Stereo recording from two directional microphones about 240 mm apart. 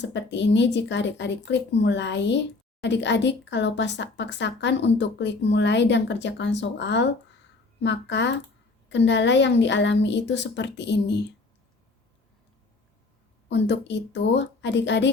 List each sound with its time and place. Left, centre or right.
0.0 s speech: left
13.5 s speech: left